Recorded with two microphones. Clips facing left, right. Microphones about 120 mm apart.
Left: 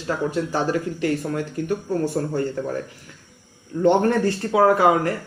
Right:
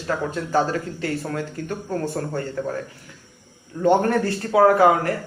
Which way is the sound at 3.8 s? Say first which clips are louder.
Left 1 dB; 20° left (ahead or behind).